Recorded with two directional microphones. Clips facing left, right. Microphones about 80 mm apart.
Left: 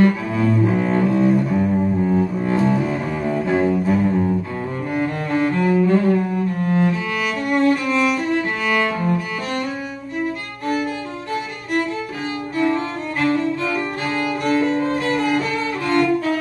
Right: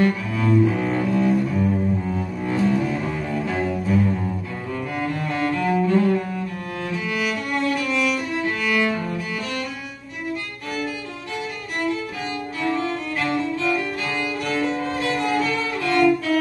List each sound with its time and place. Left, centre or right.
0.0 s cello: left
5.3 s cello: left
6.6 s music: left
13.2 s music: left